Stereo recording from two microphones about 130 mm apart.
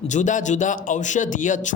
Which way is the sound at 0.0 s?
70° left (ahead or behind).